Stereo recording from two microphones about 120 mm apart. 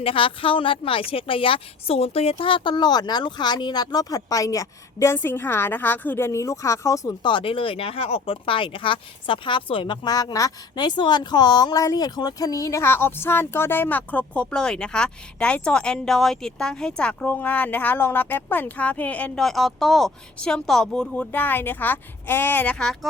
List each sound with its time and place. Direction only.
0.0 s a woman's voice: 50° left (ahead or behind); by 7.3 s 30° left (ahead or behind)
7.3 s speech: 45° left (ahead or behind); by 22.9 s 15° left (ahead or behind)